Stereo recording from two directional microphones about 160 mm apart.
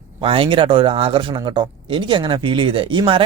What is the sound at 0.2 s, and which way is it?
Speech, 35° right (ahead or behind).